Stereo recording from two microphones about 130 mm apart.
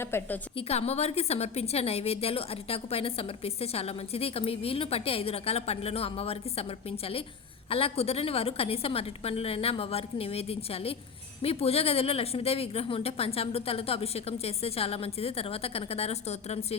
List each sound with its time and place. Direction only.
0.0 s a woman's voice: 20° left (ahead or behind)
0.5 s a woman's voice: 55° left (ahead or behind)